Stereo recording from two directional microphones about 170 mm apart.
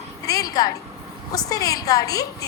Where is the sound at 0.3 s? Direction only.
20° left (ahead or behind).